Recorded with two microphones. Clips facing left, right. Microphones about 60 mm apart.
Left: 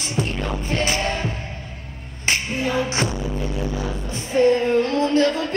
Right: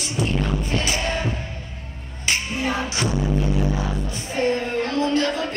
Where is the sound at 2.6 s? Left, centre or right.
Right.